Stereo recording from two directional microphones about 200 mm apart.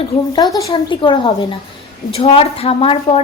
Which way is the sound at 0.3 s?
20° left (ahead or behind).